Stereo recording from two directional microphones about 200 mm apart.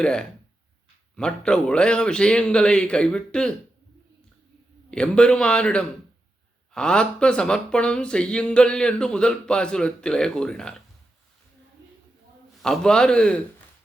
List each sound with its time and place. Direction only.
0.0 s speech: 5° left (ahead or behind)
4.9 s speech: 5° left (ahead or behind)
12.6 s speech: 5° left (ahead or behind)